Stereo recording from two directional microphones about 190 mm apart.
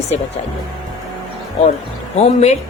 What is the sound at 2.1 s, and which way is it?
Speech, 35° left (ahead or behind).